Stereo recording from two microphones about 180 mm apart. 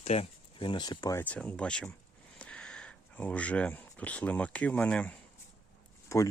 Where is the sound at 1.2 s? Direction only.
10° left (ahead or behind).